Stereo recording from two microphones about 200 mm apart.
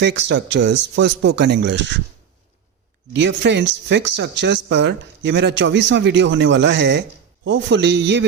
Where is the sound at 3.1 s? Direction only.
60° right (ahead or behind).